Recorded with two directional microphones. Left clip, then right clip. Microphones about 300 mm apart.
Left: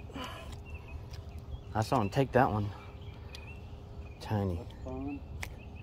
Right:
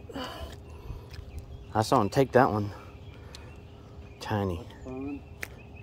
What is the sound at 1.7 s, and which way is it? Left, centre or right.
Speech, centre.